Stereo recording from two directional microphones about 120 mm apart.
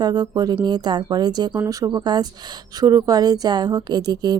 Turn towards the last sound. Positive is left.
turn(degrees=-35)  # may be behind; listen again after turning